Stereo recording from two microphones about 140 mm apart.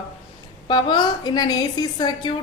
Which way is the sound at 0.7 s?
30° left (ahead or behind).